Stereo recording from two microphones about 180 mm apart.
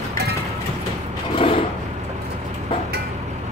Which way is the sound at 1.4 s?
30° left (ahead or behind).